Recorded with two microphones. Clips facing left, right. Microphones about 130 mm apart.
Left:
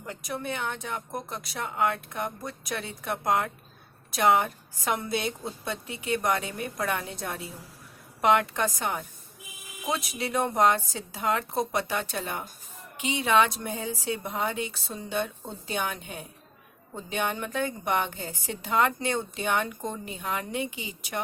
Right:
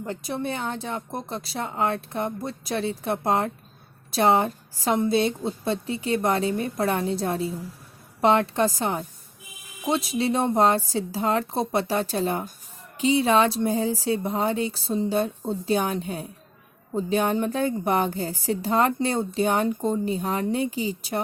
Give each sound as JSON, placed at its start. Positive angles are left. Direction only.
{"t": 0.0, "sound": "a woman's voice", "side_deg": -30}